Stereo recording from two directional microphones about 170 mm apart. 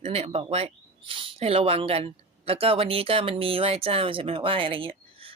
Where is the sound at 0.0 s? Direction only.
35° right (ahead or behind).